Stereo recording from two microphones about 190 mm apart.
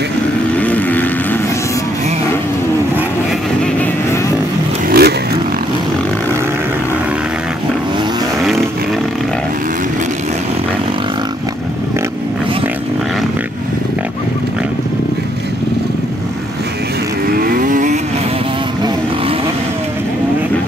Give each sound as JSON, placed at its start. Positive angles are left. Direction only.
{"t": 0.6, "sound": "vehicle", "side_deg": 10}
{"t": 4.8, "sound": "vehicle", "side_deg": -55}
{"t": 17.4, "sound": "vehicle", "side_deg": -50}